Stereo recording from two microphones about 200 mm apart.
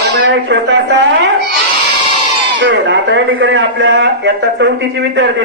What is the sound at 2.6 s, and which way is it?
A man's voice, 65° right (ahead or behind).